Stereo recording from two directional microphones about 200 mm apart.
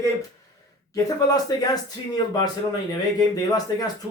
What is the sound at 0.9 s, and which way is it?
Speech, 20° left (ahead or behind).